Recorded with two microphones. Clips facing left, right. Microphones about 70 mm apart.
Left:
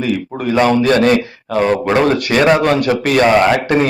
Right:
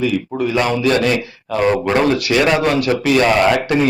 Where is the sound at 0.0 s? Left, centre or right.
Left.